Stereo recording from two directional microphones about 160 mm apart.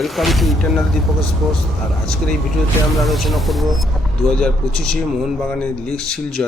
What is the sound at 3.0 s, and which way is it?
Speech, centre (ahead or behind).